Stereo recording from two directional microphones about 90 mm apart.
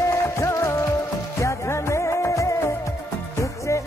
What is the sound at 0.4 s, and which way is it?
Music, 35° left (ahead or behind).